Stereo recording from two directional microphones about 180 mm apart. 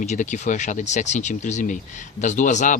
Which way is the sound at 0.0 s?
40° left (ahead or behind).